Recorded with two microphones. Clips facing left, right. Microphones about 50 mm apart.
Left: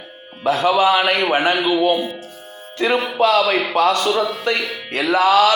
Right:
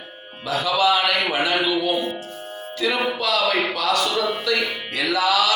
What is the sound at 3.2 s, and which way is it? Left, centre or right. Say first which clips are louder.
Music: left 5 dB; left.